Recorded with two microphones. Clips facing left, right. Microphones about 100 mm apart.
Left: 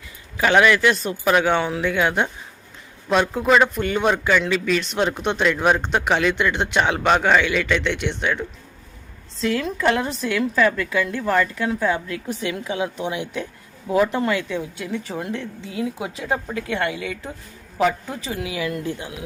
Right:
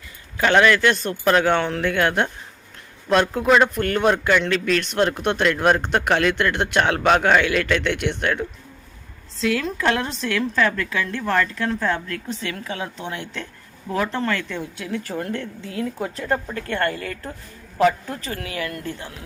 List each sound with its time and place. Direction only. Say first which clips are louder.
0.3 s speech: even; 5° left (ahead or behind)
18.3 s speech: left 4 dB; 10° left (ahead or behind)